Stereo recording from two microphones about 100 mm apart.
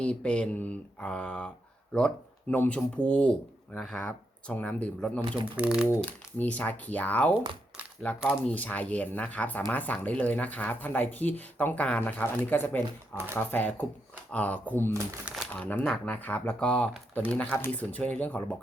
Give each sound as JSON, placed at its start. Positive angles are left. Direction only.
{"t": 0.0, "sound": "speech", "side_deg": 10}
{"t": 5.5, "sound": "speech", "side_deg": -10}
{"t": 6.0, "sound": "speech", "side_deg": 15}